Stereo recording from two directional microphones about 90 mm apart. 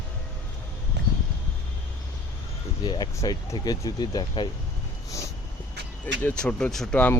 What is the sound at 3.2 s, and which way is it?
Speech, 35° left (ahead or behind).